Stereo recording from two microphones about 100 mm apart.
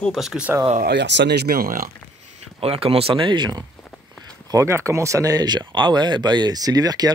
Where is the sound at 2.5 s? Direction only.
75° right (ahead or behind); by 3.7 s 45° right (ahead or behind).